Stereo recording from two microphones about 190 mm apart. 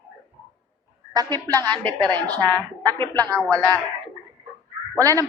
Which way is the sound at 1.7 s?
5° left (ahead or behind).